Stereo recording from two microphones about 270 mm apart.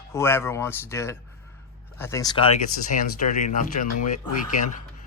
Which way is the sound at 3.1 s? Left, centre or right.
Left.